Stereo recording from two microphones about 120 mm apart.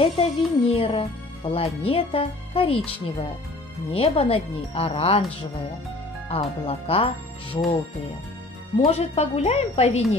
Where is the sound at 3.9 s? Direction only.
55° left (ahead or behind).